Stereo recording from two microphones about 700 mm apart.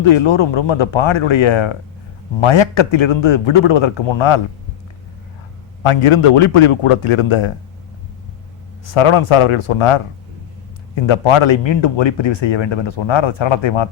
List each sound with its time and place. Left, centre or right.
0.0 s a man's voice: left
5.8 s a man's voice: left
8.9 s a man's voice: left